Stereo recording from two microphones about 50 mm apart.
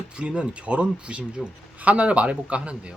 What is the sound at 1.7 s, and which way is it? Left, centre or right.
Speech, right.